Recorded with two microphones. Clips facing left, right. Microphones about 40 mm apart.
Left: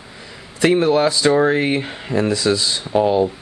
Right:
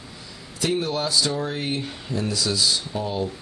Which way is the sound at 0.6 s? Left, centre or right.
Left.